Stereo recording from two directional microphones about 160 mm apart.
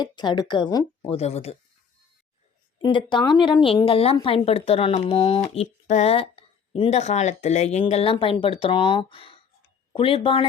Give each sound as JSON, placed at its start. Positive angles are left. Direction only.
{"t": 0.0, "sound": "speech", "side_deg": 25}
{"t": 1.1, "sound": "speech", "side_deg": 40}
{"t": 2.8, "sound": "speech", "side_deg": 30}